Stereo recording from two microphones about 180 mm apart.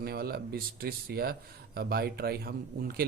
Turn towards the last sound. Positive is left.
turn(degrees=-60)  # may be behind; listen again after turning